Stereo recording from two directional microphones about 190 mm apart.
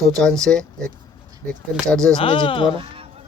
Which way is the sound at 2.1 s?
25° left (ahead or behind).